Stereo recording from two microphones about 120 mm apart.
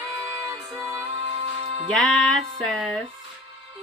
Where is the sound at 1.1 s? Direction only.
50° right (ahead or behind).